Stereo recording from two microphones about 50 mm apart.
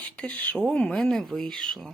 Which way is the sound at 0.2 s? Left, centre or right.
Left.